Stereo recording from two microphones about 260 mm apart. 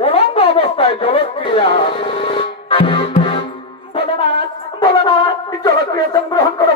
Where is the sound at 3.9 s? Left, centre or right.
Left.